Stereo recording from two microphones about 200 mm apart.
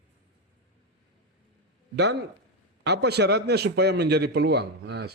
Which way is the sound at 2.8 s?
55° right (ahead or behind).